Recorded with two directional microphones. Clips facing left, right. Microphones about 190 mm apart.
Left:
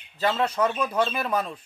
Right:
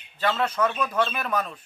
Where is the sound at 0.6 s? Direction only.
30° left (ahead or behind).